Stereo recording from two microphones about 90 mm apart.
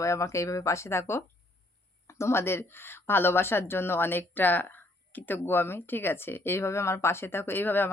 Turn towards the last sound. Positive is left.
turn(degrees=20)  # may be behind; listen again after turning